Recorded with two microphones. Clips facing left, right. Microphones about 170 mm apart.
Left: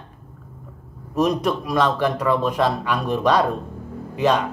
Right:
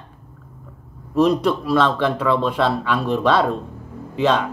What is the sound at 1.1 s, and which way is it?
A man's voice, 15° left (ahead or behind).